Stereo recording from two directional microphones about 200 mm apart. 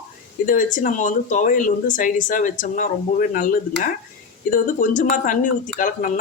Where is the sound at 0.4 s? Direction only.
40° left (ahead or behind).